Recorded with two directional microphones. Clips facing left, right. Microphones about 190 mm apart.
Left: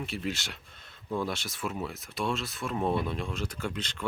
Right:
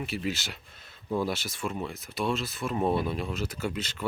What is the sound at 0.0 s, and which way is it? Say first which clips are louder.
Speech: right 2 dB; 5° right (ahead or behind).